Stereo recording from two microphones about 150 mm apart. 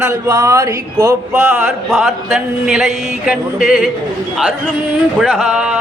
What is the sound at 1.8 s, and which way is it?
Music, centre (ahead or behind).